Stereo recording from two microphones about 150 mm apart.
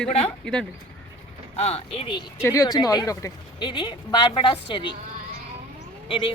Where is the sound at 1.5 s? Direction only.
45° left (ahead or behind).